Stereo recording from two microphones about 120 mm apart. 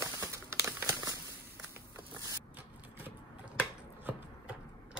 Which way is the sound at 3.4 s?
15° right (ahead or behind).